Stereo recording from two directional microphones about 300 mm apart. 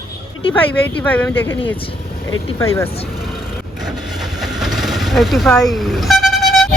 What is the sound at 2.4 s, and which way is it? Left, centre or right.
Speech, centre.